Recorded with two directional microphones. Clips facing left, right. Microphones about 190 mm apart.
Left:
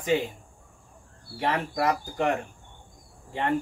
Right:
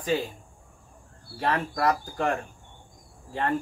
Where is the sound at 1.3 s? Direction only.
20° left (ahead or behind).